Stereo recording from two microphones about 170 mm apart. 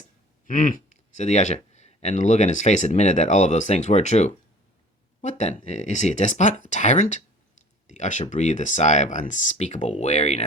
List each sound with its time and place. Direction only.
0.4 s speech: 50° left (ahead or behind)